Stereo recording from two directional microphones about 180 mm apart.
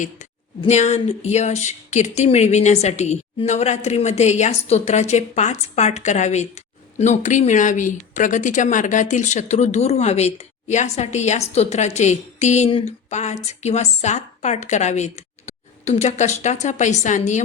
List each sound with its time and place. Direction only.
0.6 s speech: 40° left (ahead or behind)